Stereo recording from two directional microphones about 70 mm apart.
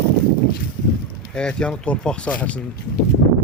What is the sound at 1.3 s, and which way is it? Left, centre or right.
Speech, centre.